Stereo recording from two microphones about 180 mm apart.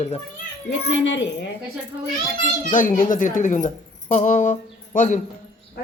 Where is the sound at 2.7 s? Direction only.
45° left (ahead or behind).